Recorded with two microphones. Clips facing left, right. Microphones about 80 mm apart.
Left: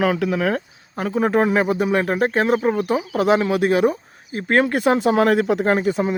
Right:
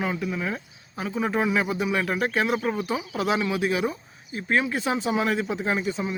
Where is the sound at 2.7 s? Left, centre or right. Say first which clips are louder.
Left 7 dB; left.